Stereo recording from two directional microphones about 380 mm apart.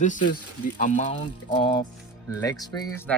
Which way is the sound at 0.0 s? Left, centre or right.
Centre.